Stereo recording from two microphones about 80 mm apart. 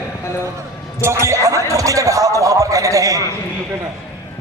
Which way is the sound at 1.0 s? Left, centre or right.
Right.